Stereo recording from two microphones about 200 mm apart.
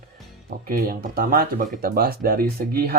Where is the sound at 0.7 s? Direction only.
45° right (ahead or behind).